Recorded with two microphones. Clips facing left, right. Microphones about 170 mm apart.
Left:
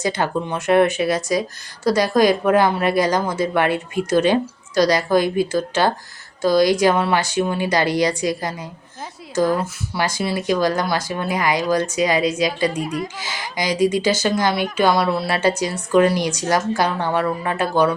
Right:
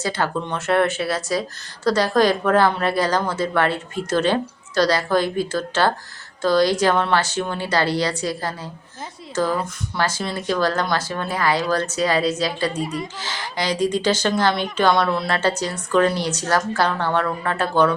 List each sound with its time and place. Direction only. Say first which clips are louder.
0.0 s speech: left 2 dB; 15° left (ahead or behind)
12.8 s speech: left 2 dB; centre (ahead or behind)
13.1 s speech: left 1 dB; 10° left (ahead or behind)